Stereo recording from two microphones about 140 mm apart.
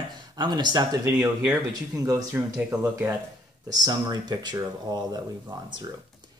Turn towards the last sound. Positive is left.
turn(degrees=-30)  # may be behind; listen again after turning